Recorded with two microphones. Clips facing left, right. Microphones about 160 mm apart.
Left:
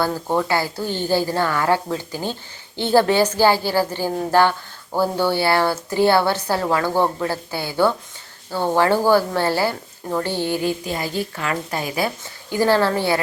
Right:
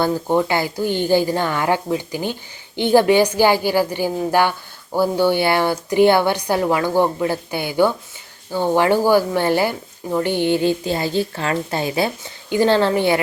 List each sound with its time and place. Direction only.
0.0 s a woman's voice: 20° right (ahead or behind)